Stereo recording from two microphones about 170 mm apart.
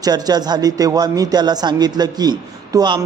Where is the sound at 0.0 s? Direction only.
25° right (ahead or behind).